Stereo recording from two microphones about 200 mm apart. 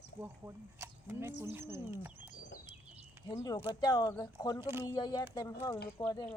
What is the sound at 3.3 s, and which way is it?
Speech, 20° left (ahead or behind).